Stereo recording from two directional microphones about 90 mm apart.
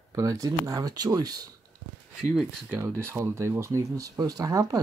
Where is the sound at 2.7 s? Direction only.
30° right (ahead or behind).